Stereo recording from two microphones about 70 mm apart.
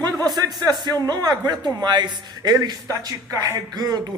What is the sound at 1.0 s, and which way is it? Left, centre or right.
A man's voice, right.